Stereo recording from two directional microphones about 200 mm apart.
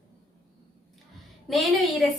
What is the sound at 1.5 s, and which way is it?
Speech, centre (ahead or behind).